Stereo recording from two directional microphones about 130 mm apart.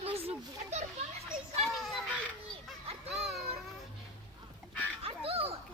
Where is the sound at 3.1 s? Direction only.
Centre (ahead or behind).